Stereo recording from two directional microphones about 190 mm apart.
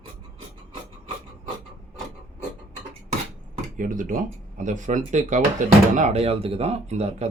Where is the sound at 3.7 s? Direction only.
45° right (ahead or behind).